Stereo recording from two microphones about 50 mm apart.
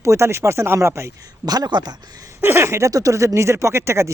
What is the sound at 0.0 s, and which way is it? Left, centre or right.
Speech, right.